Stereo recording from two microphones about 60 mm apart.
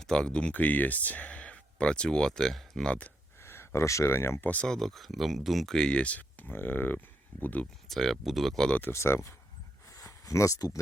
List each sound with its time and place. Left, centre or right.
0.0 s speech: centre
2.8 s speech: left
3.4 s a sound: left
4.0 s speech: left
4.6 s speech: centre
5.7 s speech: centre
7.9 s speech: centre
8.9 s speech: left
9.9 s a sound: left